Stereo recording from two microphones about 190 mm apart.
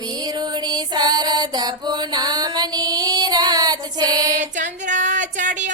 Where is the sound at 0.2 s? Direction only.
20° right (ahead or behind).